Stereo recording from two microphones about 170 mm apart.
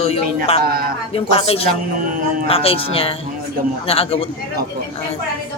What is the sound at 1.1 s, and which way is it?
Speech, 35° left (ahead or behind).